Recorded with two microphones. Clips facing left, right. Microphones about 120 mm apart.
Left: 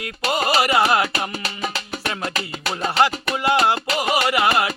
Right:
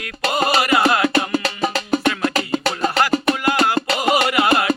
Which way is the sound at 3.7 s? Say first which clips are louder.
Right 4 dB; 30° right (ahead or behind).